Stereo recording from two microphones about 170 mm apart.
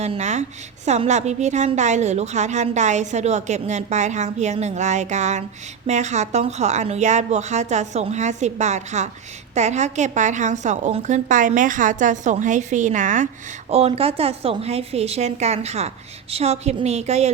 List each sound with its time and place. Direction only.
0.0 s a woman's voice: 40° right (ahead or behind)
13.7 s a woman's voice: 35° right (ahead or behind)